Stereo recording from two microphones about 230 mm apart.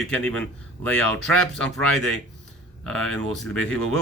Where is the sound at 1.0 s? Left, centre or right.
Right.